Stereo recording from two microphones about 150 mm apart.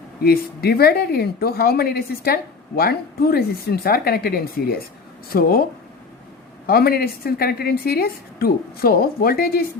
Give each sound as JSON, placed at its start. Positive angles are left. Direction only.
{"t": 0.2, "sound": "speech", "side_deg": 90}
{"t": 6.7, "sound": "speech", "side_deg": 90}